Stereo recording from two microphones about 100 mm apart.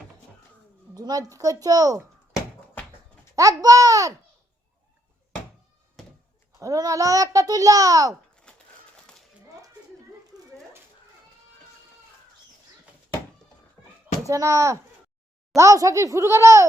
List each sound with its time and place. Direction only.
0.9 s a child's voice: 40° right (ahead or behind)
3.3 s a child's voice: 35° right (ahead or behind)
6.6 s a child's voice: 35° right (ahead or behind)
8.5 s a sound: 10° left (ahead or behind)
14.3 s a child's voice: 30° right (ahead or behind)